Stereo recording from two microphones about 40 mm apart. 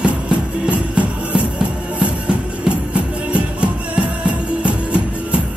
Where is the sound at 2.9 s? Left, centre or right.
Right.